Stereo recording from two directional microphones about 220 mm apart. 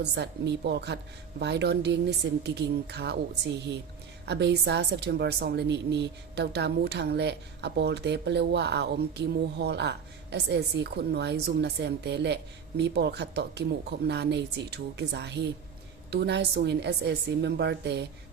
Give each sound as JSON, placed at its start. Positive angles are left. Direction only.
{"t": 0.0, "sound": "a woman's voice", "side_deg": -50}